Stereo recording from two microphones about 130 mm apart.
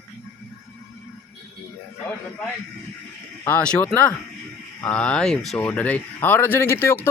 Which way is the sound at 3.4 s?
10° left (ahead or behind).